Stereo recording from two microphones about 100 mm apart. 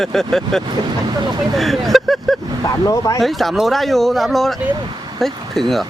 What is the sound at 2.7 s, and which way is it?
Speech, 35° left (ahead or behind).